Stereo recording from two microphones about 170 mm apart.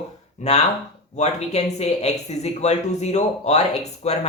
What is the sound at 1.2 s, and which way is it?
Speech, 40° left (ahead or behind).